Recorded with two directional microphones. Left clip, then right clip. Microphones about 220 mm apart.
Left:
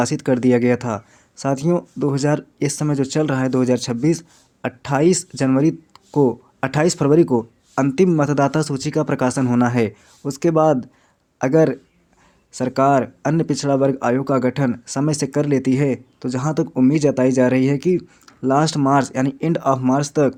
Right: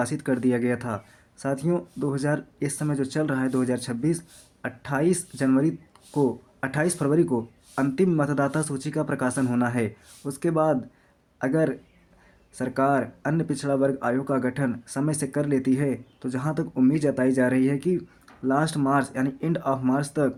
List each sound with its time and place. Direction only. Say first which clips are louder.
0.0 s speech: left 7 dB; 30° left (ahead or behind)